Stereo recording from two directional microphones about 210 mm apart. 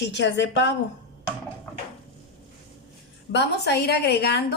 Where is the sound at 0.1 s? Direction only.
55° left (ahead or behind).